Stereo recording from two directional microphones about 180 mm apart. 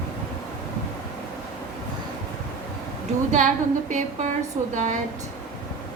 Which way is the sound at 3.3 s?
45° right (ahead or behind).